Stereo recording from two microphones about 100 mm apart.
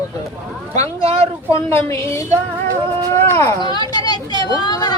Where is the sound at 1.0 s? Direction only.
80° right.